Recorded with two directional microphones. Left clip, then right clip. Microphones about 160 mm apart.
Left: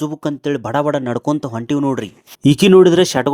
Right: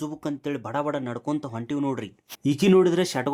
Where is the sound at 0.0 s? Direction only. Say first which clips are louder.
Left 10 dB; 40° left (ahead or behind).